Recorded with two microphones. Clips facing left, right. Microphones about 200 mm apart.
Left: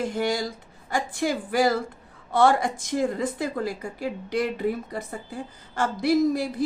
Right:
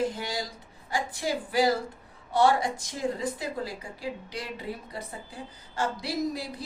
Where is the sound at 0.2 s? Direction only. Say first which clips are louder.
Left 8 dB; 50° left (ahead or behind).